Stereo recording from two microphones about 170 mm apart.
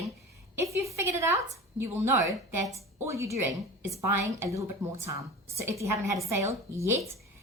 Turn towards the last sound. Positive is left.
turn(degrees=-15)  # may be behind; listen again after turning